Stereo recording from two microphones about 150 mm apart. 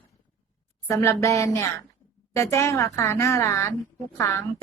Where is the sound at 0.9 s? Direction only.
20° left (ahead or behind).